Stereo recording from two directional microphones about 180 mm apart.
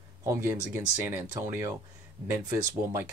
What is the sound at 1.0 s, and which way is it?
Speech, 10° right (ahead or behind).